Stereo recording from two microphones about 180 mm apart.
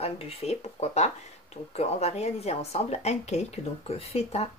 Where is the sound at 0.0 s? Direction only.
35° left (ahead or behind).